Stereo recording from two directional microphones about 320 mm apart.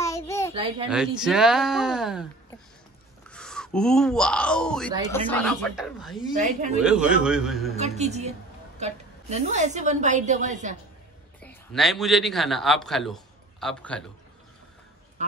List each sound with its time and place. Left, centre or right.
0.0 s a sound: centre
0.8 s speech: centre
3.3 s speech: centre
6.3 s a woman's voice: right
6.8 s speech: centre
7.7 s a woman's voice: right
11.4 s a man's voice: centre